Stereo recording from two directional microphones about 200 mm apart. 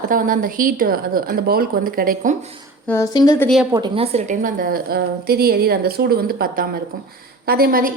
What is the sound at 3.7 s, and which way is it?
A woman's voice, 25° right (ahead or behind).